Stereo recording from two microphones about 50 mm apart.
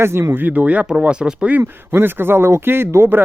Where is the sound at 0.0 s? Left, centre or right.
Right.